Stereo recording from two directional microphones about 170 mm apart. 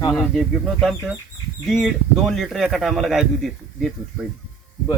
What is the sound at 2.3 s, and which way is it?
A man's voice, centre (ahead or behind).